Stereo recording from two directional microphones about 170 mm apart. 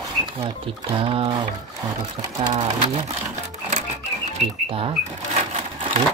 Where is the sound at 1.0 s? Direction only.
35° right (ahead or behind).